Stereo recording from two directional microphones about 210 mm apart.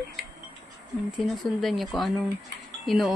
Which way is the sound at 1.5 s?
Centre (ahead or behind).